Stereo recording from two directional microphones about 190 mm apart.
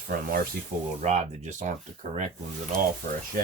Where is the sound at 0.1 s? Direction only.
50° right (ahead or behind).